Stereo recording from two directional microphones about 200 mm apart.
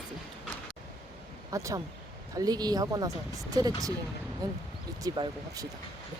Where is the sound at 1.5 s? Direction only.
15° right (ahead or behind).